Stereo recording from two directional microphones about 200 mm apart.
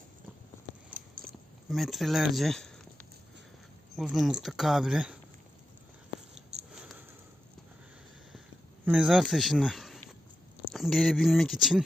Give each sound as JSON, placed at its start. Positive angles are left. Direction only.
{"t": 0.9, "sound": "biting", "side_deg": -45}
{"t": 1.7, "sound": "speech", "side_deg": 0}
{"t": 3.9, "sound": "speech", "side_deg": 0}
{"t": 6.5, "sound": "sniff", "side_deg": -30}
{"t": 8.8, "sound": "speech", "side_deg": -5}